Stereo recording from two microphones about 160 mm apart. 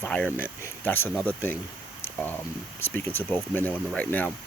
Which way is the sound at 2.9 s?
10° left (ahead or behind).